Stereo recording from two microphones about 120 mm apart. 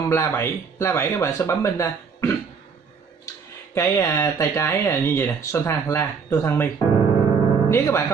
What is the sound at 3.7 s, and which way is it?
Speech, 25° left (ahead or behind).